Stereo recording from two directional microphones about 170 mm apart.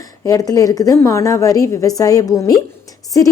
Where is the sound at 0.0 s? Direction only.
20° left (ahead or behind).